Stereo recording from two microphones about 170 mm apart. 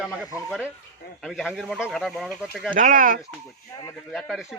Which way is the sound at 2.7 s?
50° right (ahead or behind).